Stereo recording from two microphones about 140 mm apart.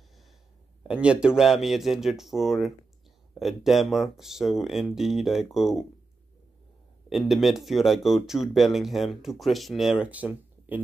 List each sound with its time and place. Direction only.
0.8 s speech: 5° right (ahead or behind)
7.1 s speech: centre (ahead or behind)